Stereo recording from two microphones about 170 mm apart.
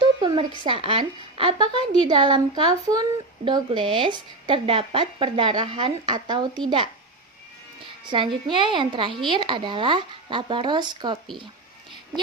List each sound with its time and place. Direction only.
0.0 s a sound: 30° right (ahead or behind)
0.6 s a woman's voice: 35° right (ahead or behind)
8.1 s a woman's voice: 30° right (ahead or behind)